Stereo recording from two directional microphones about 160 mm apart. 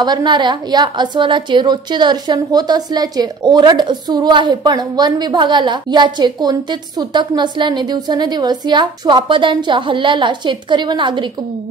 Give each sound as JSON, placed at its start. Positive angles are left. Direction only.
{"t": 0.0, "sound": "a woman's voice", "side_deg": -25}